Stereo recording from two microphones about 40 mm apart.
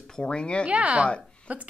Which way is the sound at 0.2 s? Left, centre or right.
Left.